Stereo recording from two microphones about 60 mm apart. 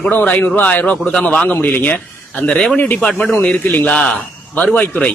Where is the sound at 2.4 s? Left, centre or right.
Centre.